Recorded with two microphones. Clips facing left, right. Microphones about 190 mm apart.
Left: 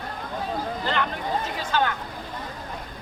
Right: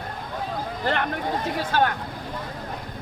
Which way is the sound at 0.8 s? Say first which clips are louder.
Right 3 dB; 55° right (ahead or behind).